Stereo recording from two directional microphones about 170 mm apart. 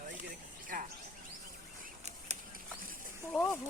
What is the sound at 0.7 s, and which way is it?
Insect, 60° right (ahead or behind).